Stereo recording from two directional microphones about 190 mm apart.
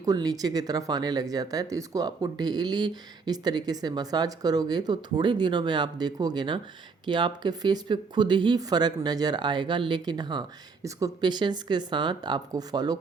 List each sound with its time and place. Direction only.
0.0 s speech: 20° right (ahead or behind)